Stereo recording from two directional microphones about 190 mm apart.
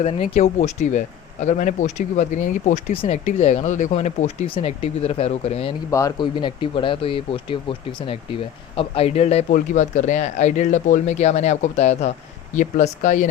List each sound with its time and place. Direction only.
0.0 s speech: 30° left (ahead or behind)
5.9 s speech: 15° left (ahead or behind); by 13.3 s 40° left (ahead or behind)